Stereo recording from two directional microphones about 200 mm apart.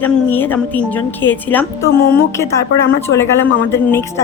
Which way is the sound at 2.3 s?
15° left (ahead or behind).